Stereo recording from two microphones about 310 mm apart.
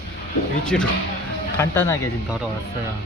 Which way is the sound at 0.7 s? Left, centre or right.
Centre.